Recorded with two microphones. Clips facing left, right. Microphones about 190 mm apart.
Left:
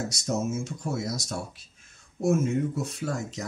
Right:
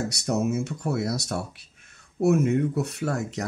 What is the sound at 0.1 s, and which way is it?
Speech, 65° right (ahead or behind).